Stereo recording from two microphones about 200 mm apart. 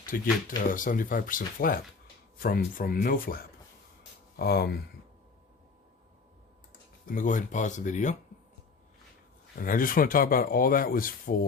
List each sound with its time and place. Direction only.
0.0 s speech: 45° left (ahead or behind)
7.1 s speech: 40° left (ahead or behind)
9.6 s speech: 45° left (ahead or behind)